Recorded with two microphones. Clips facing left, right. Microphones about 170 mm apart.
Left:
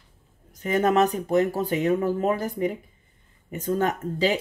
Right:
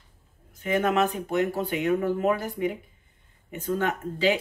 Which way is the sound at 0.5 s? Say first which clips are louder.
Left 3 dB; 40° left (ahead or behind).